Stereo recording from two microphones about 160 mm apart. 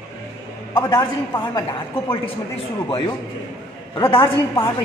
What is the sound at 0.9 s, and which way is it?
A woman's voice, 25° left (ahead or behind).